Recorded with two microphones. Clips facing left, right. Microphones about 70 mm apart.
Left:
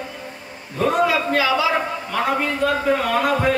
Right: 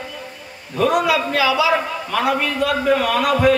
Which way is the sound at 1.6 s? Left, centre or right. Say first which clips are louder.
Right 2 dB; right.